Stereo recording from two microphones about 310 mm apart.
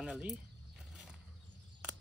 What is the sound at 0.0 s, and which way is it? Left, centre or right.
Speech, centre.